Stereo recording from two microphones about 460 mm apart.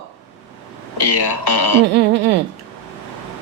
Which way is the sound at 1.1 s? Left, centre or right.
Left.